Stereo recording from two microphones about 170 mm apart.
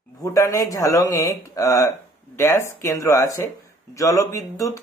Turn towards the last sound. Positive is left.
turn(degrees=20)  # may be behind; listen again after turning